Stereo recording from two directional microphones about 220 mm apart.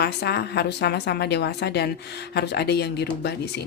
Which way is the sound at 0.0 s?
45° left (ahead or behind).